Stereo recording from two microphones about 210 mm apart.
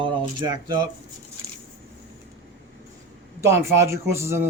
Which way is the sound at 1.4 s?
15° right (ahead or behind).